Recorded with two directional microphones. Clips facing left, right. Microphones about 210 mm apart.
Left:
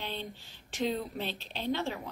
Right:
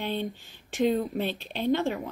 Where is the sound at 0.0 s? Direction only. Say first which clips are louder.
Right 8 dB; 50° right (ahead or behind).